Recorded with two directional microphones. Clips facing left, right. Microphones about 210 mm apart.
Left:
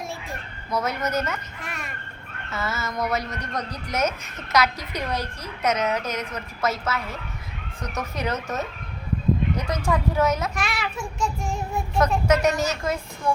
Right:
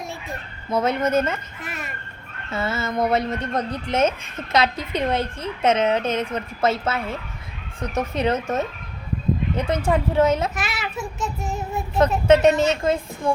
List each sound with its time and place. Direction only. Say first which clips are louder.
0.7 s speech: right 5 dB; 25° right (ahead or behind)
1.6 s a sound: right 2 dB; centre (ahead or behind)
2.5 s speech: right 5 dB; 30° right (ahead or behind)
10.5 s child singing: even; 5° right (ahead or behind)
12.3 s speech: right 6 dB; 25° right (ahead or behind)